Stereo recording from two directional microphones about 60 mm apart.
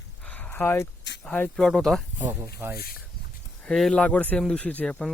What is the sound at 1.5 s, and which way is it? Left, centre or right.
Speech, centre.